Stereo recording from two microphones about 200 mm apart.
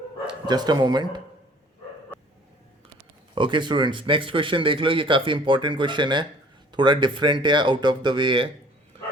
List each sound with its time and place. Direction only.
0.3 s speech: 20° right (ahead or behind)
3.3 s speech: 25° right (ahead or behind)